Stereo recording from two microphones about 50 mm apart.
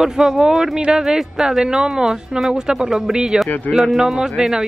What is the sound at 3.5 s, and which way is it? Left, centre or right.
Speech, left.